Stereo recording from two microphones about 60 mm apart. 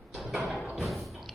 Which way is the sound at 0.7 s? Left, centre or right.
Centre.